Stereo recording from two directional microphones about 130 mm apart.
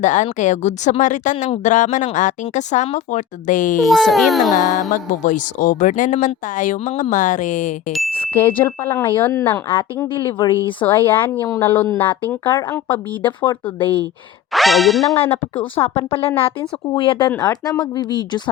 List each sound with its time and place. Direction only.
0.0 s speech: 70° left (ahead or behind); by 3.8 s 85° left
3.8 s a child's voice: centre (ahead or behind)
4.5 s music: 90° left
4.9 s speech: 85° left
8.2 s a woman's voice: 15° left (ahead or behind)
10.4 s a woman's voice: 35° left (ahead or behind)
10.8 s a woman's voice: 15° left (ahead or behind)
13.2 s a woman's voice: 35° left (ahead or behind)
14.5 s a child's voice: centre (ahead or behind)
15.7 s a woman's voice: 45° left (ahead or behind)
17.4 s a woman's voice: 30° left (ahead or behind)